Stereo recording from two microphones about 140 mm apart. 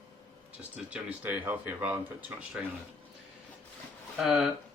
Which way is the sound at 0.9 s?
10° right (ahead or behind).